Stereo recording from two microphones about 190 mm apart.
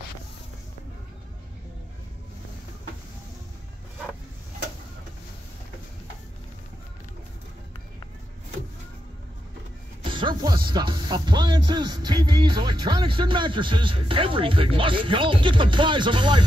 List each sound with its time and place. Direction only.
10.0 s speech: 25° right (ahead or behind)